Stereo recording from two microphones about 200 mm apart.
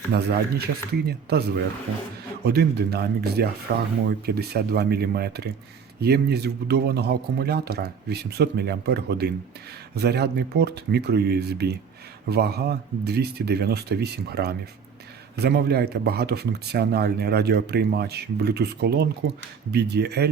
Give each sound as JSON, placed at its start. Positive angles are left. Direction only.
{"t": 0.1, "sound": "speech", "side_deg": -55}